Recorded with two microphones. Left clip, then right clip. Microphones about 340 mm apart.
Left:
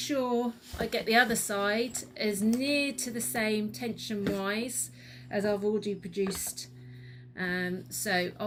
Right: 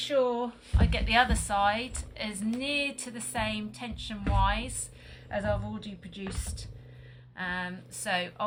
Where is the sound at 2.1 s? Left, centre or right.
Right.